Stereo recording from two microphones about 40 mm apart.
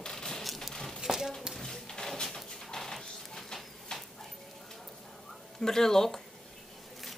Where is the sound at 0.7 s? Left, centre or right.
Centre.